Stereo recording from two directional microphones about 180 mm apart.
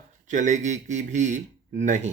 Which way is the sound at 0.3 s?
40° right (ahead or behind).